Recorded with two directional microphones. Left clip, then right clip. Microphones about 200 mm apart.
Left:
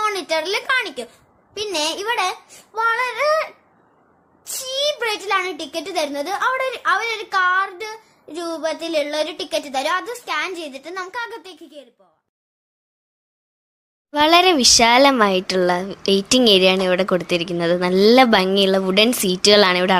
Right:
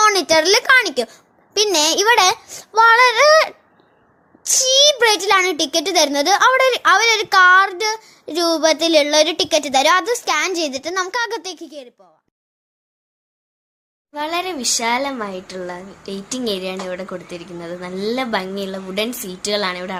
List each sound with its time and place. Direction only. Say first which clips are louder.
0.0 s a child's voice: right 7 dB; 35° right (ahead or behind)
14.1 s speech: left 9 dB; 40° left (ahead or behind)